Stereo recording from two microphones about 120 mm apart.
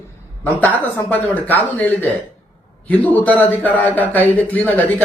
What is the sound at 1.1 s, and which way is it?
Speech, 15° left (ahead or behind).